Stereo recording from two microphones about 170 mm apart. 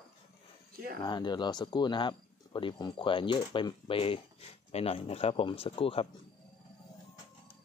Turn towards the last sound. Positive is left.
turn(degrees=35)  # may be behind; listen again after turning